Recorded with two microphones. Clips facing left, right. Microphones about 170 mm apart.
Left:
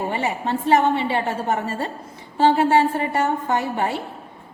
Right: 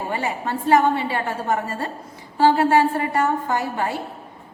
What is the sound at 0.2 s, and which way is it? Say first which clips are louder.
A woman's voice: left 2 dB; 25° left (ahead or behind).